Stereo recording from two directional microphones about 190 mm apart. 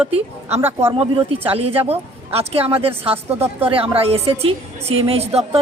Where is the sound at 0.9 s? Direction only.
30° right (ahead or behind).